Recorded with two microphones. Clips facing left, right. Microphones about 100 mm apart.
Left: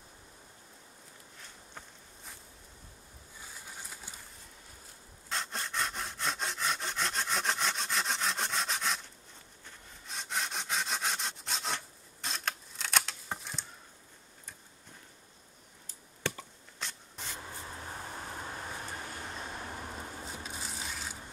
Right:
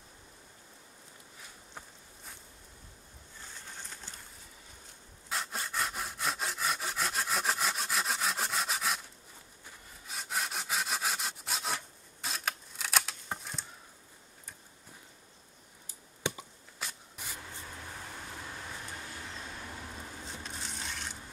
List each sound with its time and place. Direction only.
1.4 s walk: 5° right (ahead or behind)
3.3 s pigeon: 10° left (ahead or behind)
5.3 s sawing: 5° right (ahead or behind)
10.0 s sawing: 5° right (ahead or behind)
16.2 s chop: 15° right (ahead or behind)
17.7 s vehicle: 30° left (ahead or behind)
20.2 s a sound: 5° left (ahead or behind)